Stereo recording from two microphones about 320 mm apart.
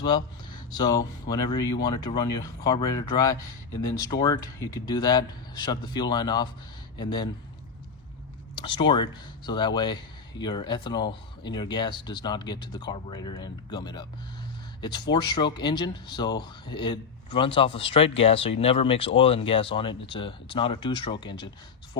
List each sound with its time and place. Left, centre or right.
0.7 s speech: centre
8.5 s speech: centre